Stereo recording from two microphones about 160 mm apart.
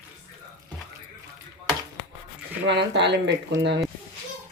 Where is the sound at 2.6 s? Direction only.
90° right.